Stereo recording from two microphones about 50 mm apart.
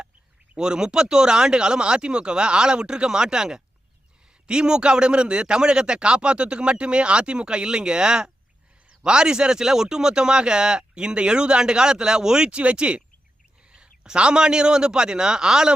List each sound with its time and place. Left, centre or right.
0.5 s a man's voice: centre